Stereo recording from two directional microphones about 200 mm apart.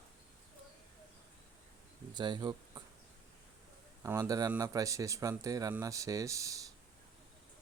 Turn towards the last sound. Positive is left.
turn(degrees=-15)  # may be behind; listen again after turning